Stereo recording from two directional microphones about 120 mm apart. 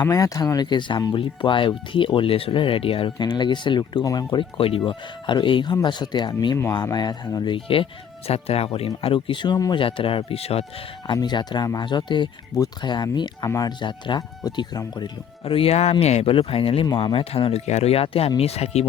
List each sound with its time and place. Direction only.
0.0 s speech: 30° left (ahead or behind)
4.4 s speech: 50° left (ahead or behind)
8.3 s speech: 55° left (ahead or behind); by 9.8 s 35° left (ahead or behind)
9.8 s speech: 50° left (ahead or behind)
11.0 s speech: 35° left (ahead or behind)
15.4 s speech: 50° left (ahead or behind)
16.3 s speech: 50° left (ahead or behind)
16.8 s speech: 40° left (ahead or behind); by 18.9 s 60° left (ahead or behind)